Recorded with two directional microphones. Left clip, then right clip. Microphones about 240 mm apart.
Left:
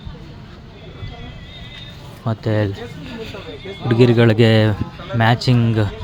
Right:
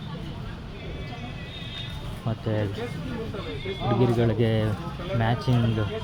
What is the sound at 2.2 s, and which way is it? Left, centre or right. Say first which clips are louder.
Speech: left 9 dB; left.